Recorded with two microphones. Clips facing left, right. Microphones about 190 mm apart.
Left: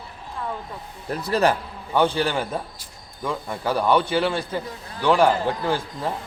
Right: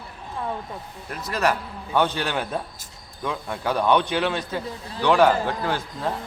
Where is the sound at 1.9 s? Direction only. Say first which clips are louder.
Left 2 dB; 10° left (ahead or behind).